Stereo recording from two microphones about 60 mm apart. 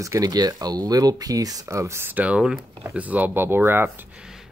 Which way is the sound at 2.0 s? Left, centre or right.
Right.